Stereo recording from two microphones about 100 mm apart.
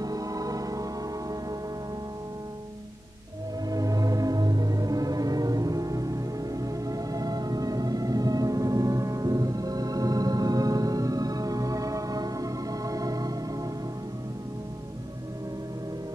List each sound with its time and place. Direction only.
0.0 s music: 35° right (ahead or behind)
3.6 s music: 35° right (ahead or behind)